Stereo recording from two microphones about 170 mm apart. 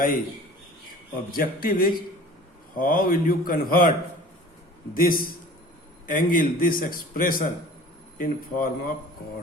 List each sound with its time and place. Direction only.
1.4 s a man's voice: 55° left (ahead or behind)
4.9 s a man's voice: 55° left (ahead or behind)